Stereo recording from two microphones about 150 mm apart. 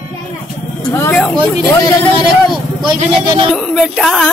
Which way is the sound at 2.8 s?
30° right (ahead or behind).